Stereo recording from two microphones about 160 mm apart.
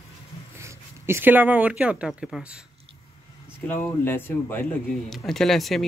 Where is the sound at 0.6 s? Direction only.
15° right (ahead or behind).